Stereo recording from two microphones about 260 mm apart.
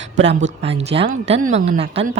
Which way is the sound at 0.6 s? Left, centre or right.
Right.